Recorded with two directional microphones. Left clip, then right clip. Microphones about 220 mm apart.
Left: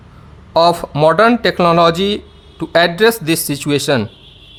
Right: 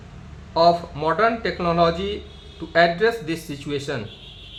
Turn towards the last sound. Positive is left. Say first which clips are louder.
# left 12 dB
turn(degrees=55)  # may be behind; listen again after turning